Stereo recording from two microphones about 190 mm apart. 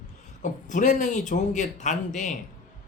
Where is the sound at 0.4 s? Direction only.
40° left (ahead or behind).